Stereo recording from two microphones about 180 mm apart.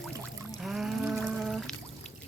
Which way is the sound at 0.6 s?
Centre (ahead or behind).